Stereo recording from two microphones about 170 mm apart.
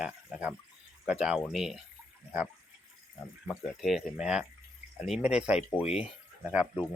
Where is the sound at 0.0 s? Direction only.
5° right (ahead or behind).